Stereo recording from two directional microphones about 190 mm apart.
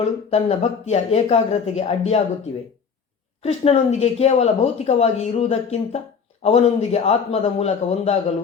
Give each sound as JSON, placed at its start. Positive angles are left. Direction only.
{"t": 0.0, "sound": "speech", "side_deg": 30}
{"t": 3.4, "sound": "speech", "side_deg": 35}